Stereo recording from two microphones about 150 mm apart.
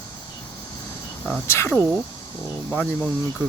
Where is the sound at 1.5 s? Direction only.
15° left (ahead or behind).